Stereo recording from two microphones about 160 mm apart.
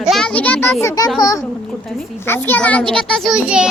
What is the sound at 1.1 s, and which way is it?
Speech, 25° left (ahead or behind).